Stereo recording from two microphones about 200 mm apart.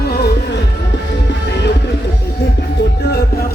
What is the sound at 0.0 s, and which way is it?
Music, 50° left (ahead or behind).